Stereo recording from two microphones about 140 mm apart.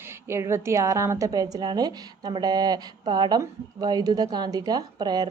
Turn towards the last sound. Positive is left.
turn(degrees=-30)  # may be behind; listen again after turning